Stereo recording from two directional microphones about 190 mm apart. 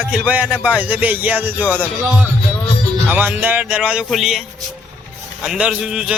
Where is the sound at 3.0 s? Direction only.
10° right (ahead or behind).